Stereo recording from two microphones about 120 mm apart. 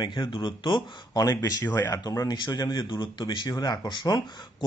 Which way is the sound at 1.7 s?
20° left (ahead or behind).